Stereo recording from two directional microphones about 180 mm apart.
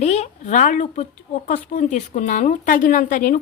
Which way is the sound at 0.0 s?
40° left (ahead or behind).